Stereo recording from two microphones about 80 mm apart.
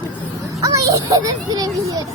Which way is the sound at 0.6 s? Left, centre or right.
Right.